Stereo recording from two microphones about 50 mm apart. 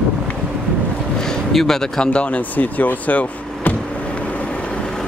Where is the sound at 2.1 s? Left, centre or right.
Left.